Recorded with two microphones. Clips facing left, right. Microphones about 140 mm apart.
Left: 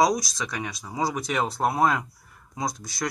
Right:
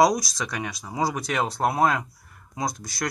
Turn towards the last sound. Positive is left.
turn(degrees=0)  # may be behind; listen again after turning